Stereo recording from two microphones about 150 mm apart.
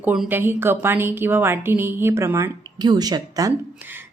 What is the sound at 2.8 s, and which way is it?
Speech, 25° right (ahead or behind).